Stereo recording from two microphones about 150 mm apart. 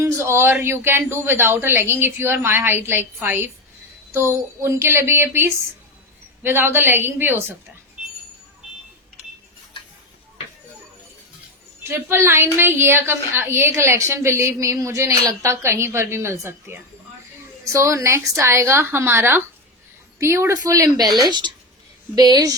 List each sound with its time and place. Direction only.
0.0 s speech: 20° right (ahead or behind)
11.8 s a woman's voice: 15° right (ahead or behind)